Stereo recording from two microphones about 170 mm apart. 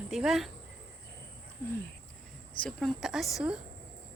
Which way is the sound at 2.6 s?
Centre (ahead or behind).